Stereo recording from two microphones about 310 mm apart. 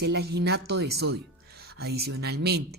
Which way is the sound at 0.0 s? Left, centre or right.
Right.